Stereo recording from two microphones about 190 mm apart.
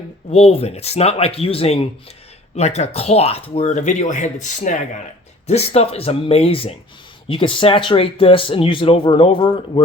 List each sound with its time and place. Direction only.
0.3 s speech: 35° left (ahead or behind)